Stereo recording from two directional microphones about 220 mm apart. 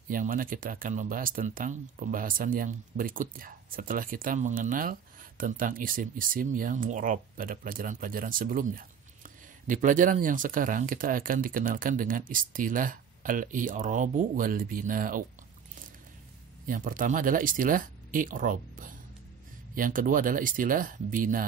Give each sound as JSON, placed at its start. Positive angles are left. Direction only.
{"t": 0.1, "sound": "speech", "side_deg": -40}
{"t": 16.6, "sound": "speech", "side_deg": -40}